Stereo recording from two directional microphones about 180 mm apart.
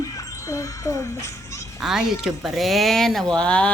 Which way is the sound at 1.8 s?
Centre (ahead or behind).